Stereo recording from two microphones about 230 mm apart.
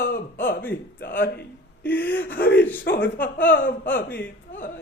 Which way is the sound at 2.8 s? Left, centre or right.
Left.